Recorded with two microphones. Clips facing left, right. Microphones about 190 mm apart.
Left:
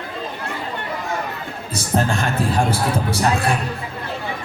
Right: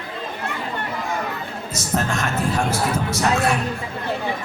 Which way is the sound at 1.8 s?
30° left (ahead or behind).